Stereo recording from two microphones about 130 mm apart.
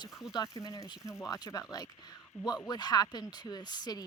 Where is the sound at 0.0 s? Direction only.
25° left (ahead or behind).